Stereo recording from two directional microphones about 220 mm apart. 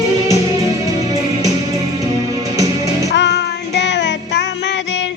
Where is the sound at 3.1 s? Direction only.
50° left (ahead or behind).